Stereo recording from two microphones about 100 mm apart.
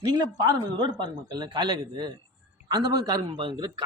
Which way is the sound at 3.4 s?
55° right (ahead or behind).